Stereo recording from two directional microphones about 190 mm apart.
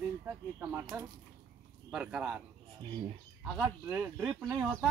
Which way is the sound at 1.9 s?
5° right (ahead or behind).